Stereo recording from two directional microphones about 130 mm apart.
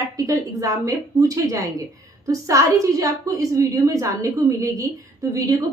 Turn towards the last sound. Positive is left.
turn(degrees=-25)  # may be behind; listen again after turning